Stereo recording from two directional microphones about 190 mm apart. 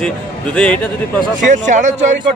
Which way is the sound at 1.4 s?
40° right (ahead or behind).